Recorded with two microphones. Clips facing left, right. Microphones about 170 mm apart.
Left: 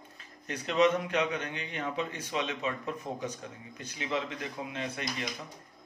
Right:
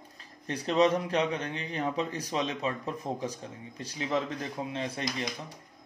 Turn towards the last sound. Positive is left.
turn(degrees=-30)  # may be behind; listen again after turning